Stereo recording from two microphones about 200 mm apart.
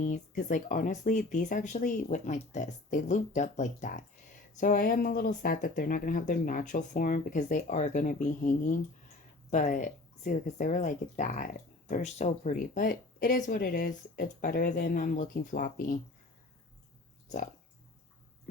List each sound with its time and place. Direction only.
0.0 s speech: 40° left (ahead or behind)
17.2 s speech: 40° left (ahead or behind)